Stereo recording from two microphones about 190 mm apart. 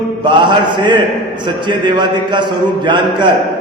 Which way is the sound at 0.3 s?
25° right (ahead or behind).